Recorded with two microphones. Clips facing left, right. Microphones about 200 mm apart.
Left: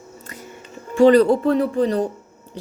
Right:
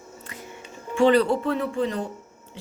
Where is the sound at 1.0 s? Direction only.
40° left (ahead or behind).